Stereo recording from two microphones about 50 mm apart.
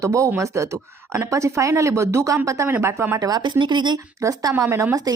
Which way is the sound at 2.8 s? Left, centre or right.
Right.